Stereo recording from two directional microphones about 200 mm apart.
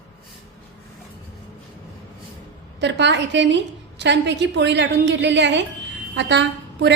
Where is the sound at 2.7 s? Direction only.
60° right (ahead or behind).